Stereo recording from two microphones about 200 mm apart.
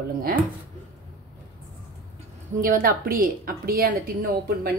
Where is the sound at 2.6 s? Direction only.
45° right (ahead or behind).